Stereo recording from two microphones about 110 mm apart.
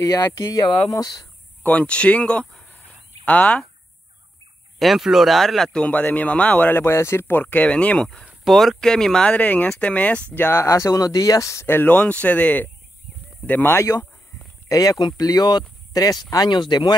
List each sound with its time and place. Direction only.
0.0 s speech: 35° left (ahead or behind)
1.6 s speech: 15° left (ahead or behind)
4.7 s speech: centre (ahead or behind); by 16.9 s 40° left (ahead or behind)